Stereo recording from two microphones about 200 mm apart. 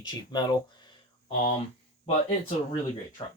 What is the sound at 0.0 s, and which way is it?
Speech, 20° left (ahead or behind).